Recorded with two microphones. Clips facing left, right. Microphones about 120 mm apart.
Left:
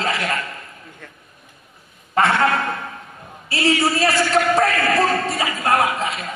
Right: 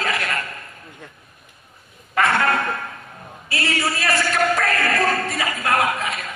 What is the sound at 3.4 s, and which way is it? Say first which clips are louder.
A man's voice: left 5 dB; 30° left (ahead or behind).